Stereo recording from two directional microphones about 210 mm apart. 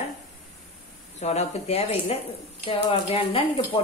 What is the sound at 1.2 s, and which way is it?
Speech, 30° left (ahead or behind).